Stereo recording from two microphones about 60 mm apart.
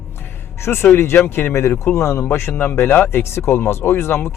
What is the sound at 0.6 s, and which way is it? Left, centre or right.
Speech, left.